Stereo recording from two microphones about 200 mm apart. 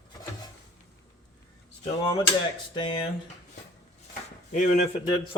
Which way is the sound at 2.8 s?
20° left (ahead or behind).